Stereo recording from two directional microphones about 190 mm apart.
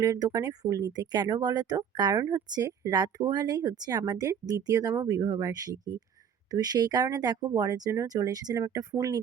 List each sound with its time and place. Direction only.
0.0 s speech: 20° right (ahead or behind)